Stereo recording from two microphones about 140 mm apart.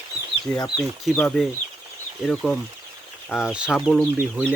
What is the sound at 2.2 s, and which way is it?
Speech, centre (ahead or behind).